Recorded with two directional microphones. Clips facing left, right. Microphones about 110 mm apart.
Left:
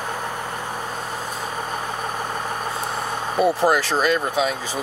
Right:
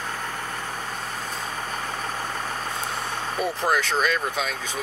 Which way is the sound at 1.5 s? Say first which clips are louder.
Left 4 dB; 15° left (ahead or behind).